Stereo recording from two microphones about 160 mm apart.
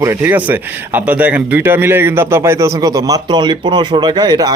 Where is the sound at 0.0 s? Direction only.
15° right (ahead or behind).